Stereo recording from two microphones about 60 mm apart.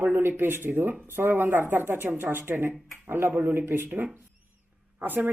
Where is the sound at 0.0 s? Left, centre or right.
Right.